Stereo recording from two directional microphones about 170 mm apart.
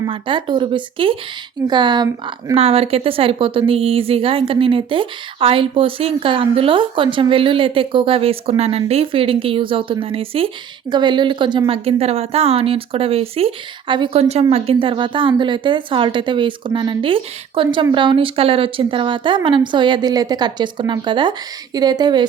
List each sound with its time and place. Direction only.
0.0 s a woman's voice: 30° right (ahead or behind)